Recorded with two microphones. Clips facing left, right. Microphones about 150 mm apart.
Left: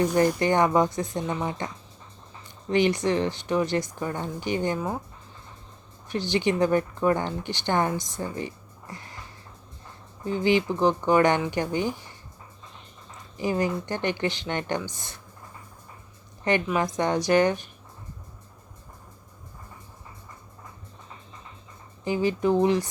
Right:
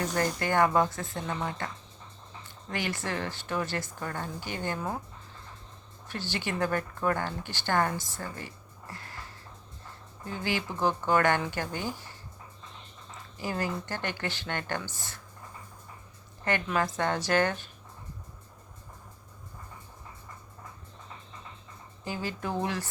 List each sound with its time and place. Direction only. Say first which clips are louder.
0.0 s speech: left 8 dB; 20° left (ahead or behind)
6.1 s speech: left 9 dB; 15° left (ahead or behind)
10.2 s speech: left 10 dB; 20° left (ahead or behind)
13.3 s speech: left 7 dB; 15° left (ahead or behind)
16.4 s a woman's voice: left 4 dB; 20° left (ahead or behind)
22.0 s speech: left 11 dB; 15° left (ahead or behind)